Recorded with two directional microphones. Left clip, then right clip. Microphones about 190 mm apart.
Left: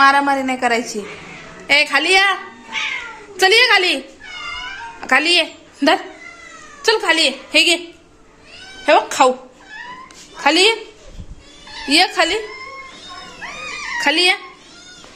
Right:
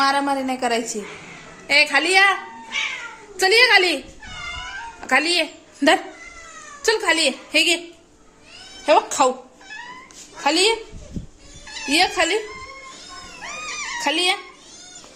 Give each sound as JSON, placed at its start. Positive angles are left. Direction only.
{"t": 0.0, "sound": "a woman's voice", "side_deg": -15}
{"t": 6.8, "sound": "a woman's voice", "side_deg": -15}
{"t": 8.8, "sound": "a woman's voice", "side_deg": -10}
{"t": 10.4, "sound": "a woman's voice", "side_deg": -10}
{"t": 11.9, "sound": "a woman's voice", "side_deg": -10}
{"t": 14.0, "sound": "speech", "side_deg": -5}